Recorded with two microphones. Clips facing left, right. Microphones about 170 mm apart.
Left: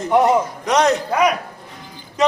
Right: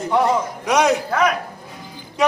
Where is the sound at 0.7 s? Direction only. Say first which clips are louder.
Even; 10° right (ahead or behind).